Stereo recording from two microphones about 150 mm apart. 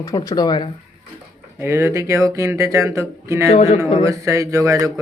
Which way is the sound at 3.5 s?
45° left (ahead or behind).